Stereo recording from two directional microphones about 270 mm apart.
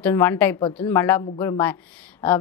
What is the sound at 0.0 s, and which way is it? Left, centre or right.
Speech, centre.